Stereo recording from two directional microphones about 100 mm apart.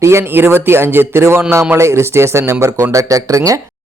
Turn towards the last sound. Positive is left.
turn(degrees=-35)  # may be behind; listen again after turning